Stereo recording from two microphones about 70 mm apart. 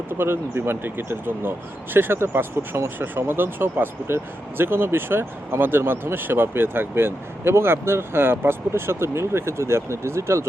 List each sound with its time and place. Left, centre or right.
0.2 s speech: right